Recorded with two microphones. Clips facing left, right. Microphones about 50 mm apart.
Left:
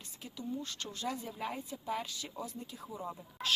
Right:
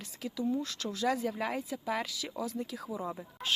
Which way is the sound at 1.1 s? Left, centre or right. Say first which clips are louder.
Right 7 dB; right.